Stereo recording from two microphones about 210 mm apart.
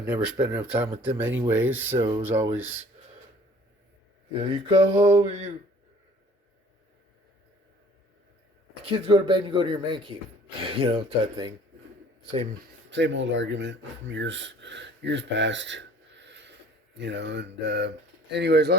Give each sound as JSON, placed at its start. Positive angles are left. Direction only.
{"t": 0.0, "sound": "speech", "side_deg": -5}
{"t": 1.6, "sound": "speech", "side_deg": -70}
{"t": 2.0, "sound": "speech", "side_deg": -25}
{"t": 2.3, "sound": "speech", "side_deg": -10}
{"t": 4.3, "sound": "speech", "side_deg": -25}
{"t": 4.9, "sound": "speech", "side_deg": -10}
{"t": 5.2, "sound": "speech", "side_deg": -30}
{"t": 8.8, "sound": "speech", "side_deg": -25}
{"t": 12.9, "sound": "speech", "side_deg": -60}